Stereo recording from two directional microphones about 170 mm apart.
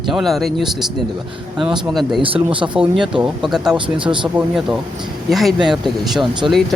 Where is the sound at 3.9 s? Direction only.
30° right (ahead or behind).